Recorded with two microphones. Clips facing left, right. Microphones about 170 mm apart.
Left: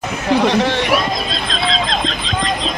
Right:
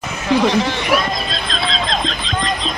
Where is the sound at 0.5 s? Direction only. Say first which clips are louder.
Left 2 dB; 65° left (ahead or behind).